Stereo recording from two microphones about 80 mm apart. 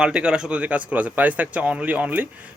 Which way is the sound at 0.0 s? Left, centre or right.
Centre.